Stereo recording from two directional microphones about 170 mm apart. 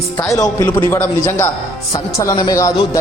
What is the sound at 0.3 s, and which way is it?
A man's voice, 20° left (ahead or behind).